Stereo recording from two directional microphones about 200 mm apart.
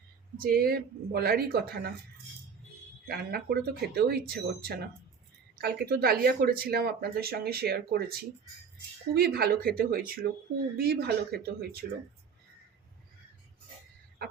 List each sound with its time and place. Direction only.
0.3 s speech: 45° right (ahead or behind)
3.1 s speech: 55° right (ahead or behind)